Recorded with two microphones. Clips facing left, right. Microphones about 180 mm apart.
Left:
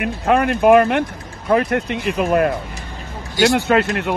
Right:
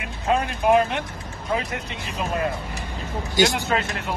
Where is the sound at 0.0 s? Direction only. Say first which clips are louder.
Left 7 dB; 60° left (ahead or behind).